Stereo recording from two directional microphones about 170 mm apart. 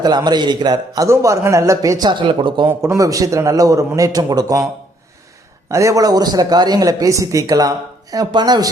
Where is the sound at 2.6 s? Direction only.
15° right (ahead or behind).